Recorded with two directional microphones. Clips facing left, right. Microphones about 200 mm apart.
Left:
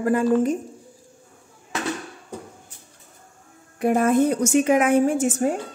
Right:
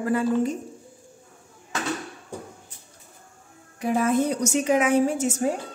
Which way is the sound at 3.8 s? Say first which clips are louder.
Left 4 dB; 55° left (ahead or behind).